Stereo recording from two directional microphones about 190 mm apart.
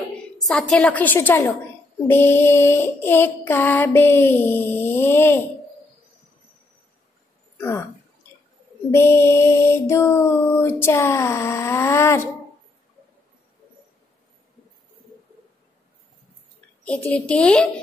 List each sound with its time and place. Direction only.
0.4 s a woman's voice: centre (ahead or behind)
7.5 s speech: 10° left (ahead or behind)
8.9 s a woman's voice: 15° left (ahead or behind)
16.8 s a woman's voice: 5° left (ahead or behind)